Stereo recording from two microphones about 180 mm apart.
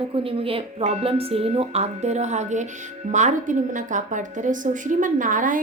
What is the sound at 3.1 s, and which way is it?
A woman's voice, 45° right (ahead or behind).